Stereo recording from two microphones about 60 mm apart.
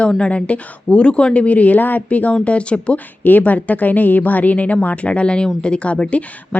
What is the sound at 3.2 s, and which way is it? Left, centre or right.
A woman's voice, left.